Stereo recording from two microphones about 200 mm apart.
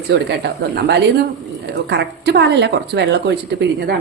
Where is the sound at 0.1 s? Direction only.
55° right (ahead or behind).